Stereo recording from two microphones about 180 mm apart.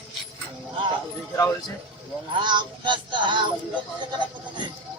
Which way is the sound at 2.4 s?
25° right (ahead or behind).